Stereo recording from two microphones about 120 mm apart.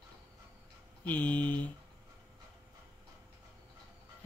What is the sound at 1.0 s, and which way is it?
Mantra, 15° left (ahead or behind).